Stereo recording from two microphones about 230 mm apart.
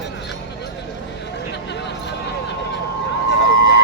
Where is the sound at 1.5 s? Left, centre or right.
Left.